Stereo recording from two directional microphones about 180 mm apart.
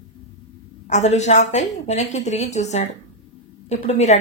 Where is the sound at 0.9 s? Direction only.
40° left (ahead or behind).